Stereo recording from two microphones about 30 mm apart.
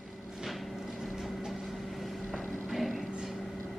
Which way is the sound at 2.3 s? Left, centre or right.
Centre.